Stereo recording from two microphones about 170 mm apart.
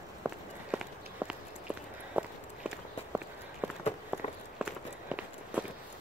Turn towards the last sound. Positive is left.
turn(degrees=-5)  # may be behind; listen again after turning